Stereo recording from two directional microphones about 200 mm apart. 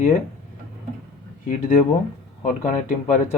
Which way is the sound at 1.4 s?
40° left (ahead or behind).